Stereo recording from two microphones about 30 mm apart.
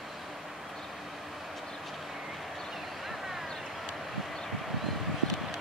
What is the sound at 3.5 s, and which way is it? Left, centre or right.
Vehicle, centre.